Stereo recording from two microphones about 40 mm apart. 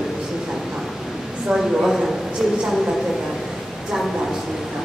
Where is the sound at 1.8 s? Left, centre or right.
Centre.